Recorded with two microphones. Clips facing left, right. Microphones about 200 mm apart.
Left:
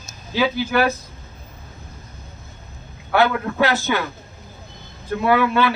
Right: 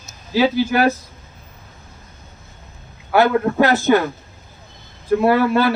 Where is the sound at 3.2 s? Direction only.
45° right (ahead or behind).